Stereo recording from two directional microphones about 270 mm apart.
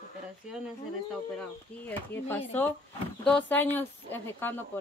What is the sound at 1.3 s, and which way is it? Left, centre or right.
Speech, centre.